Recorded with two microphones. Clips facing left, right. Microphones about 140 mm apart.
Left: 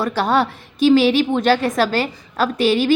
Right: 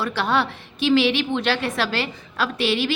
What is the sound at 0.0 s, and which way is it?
A woman's voice, 40° left (ahead or behind).